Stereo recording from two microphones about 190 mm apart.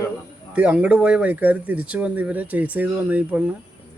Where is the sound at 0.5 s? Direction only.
5° right (ahead or behind).